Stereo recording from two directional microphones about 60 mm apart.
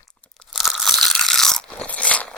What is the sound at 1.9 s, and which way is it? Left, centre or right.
Crunch, left.